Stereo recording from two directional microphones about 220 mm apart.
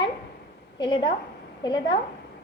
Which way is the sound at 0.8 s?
20° left (ahead or behind).